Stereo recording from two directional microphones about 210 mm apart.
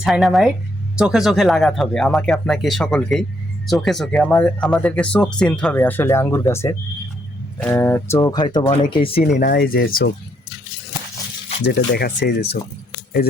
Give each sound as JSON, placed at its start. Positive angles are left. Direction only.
{"t": 0.0, "sound": "speech", "side_deg": 0}
{"t": 9.4, "sound": "speech", "side_deg": 45}
{"t": 11.6, "sound": "speech", "side_deg": 50}